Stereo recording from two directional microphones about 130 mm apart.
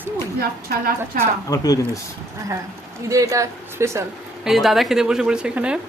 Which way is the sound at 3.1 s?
25° right (ahead or behind).